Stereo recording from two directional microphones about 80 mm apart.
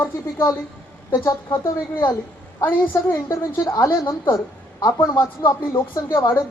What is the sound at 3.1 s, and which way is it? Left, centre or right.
A woman's voice, left.